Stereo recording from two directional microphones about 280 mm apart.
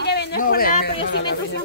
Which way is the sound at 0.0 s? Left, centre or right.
Left.